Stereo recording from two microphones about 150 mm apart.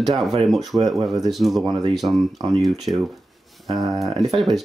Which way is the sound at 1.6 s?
30° right (ahead or behind).